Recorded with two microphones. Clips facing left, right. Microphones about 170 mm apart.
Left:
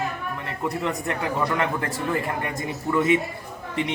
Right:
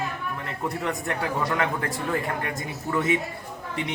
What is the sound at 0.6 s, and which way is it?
Speech, centre (ahead or behind).